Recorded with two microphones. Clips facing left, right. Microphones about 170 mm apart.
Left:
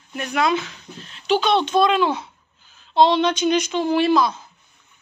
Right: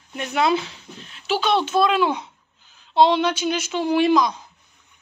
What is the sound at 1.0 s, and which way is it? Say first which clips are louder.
Speech: left 3 dB; 5° right (ahead or behind).